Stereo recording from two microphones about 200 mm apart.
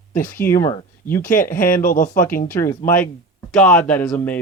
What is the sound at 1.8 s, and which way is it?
Speech, 45° left (ahead or behind).